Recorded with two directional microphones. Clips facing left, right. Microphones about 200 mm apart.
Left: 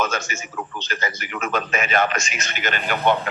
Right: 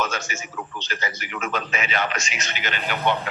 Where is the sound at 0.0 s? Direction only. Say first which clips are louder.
Left 3 dB; 50° left (ahead or behind).